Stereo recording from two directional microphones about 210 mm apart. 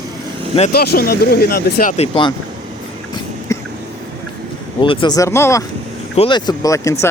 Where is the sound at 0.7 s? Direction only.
45° left (ahead or behind).